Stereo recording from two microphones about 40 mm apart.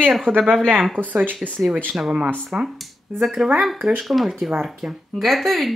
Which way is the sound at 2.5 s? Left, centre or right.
Right.